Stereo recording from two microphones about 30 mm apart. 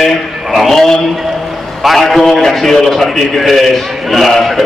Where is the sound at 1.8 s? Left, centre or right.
Centre.